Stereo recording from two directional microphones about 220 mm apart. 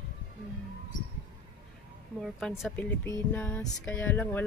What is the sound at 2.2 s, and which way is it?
A woman's voice, centre (ahead or behind).